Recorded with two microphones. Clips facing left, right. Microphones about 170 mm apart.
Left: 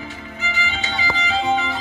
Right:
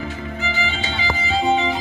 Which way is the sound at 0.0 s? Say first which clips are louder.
Right 4 dB; 40° right (ahead or behind).